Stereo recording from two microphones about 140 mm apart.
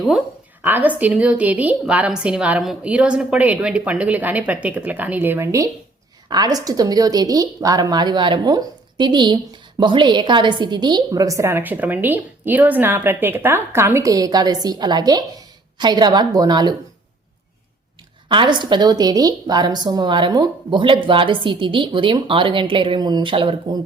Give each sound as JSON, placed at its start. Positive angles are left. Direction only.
{"t": 0.6, "sound": "a woman's voice", "side_deg": -10}
{"t": 18.3, "sound": "a woman's voice", "side_deg": -35}